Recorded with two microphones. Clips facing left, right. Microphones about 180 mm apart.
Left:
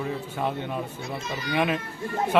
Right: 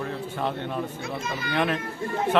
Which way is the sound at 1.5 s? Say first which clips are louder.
Even; 5° left (ahead or behind).